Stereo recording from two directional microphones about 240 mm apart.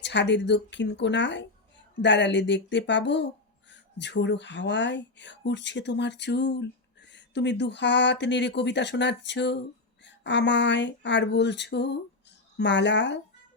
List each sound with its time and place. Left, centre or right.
0.0 s speech: left